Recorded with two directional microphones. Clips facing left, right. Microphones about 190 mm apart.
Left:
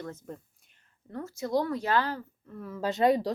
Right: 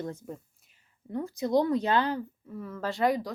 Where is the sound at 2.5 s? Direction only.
Centre (ahead or behind).